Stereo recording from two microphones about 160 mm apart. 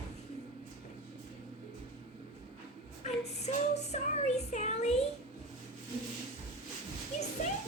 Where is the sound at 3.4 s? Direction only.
45° left (ahead or behind).